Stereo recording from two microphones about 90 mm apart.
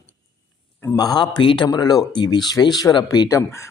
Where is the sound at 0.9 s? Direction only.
45° left (ahead or behind).